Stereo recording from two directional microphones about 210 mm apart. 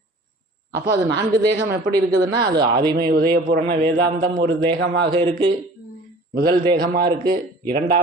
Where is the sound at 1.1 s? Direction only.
50° right (ahead or behind).